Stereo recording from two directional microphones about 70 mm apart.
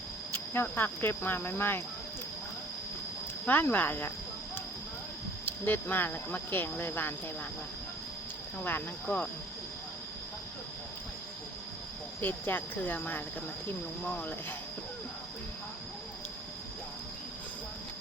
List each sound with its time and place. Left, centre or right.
0.3 s speech: left
3.4 s speech: left
5.5 s speech: left
8.5 s speech: left
12.2 s speech: left